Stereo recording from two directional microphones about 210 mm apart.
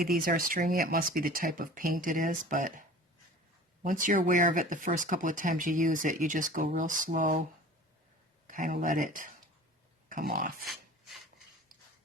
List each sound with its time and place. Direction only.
0.0 s speech: 45° right (ahead or behind)
3.8 s speech: 40° right (ahead or behind)
8.4 s speech: 40° right (ahead or behind)
10.1 s a sound: 40° right (ahead or behind)